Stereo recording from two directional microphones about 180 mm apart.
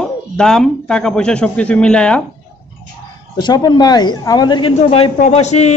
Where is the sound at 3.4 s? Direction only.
25° left (ahead or behind).